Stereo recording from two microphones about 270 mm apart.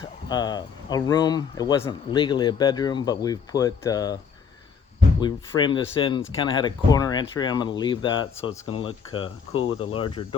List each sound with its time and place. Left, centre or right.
0.3 s speech: centre
5.2 s speech: centre
9.5 s speech: left
9.9 s speech: centre